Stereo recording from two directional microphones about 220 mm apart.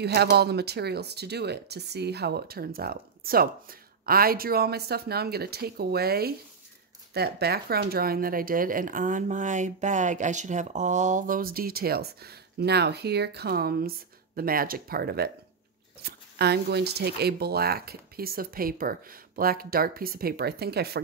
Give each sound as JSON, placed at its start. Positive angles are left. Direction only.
{"t": 0.0, "sound": "speech", "side_deg": -45}